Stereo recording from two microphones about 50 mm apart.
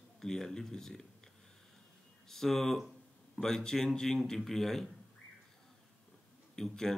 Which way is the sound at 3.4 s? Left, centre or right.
Centre.